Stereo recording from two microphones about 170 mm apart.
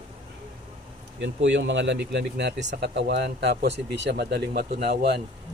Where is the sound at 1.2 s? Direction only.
90° right; by 4.6 s 70° right (ahead or behind).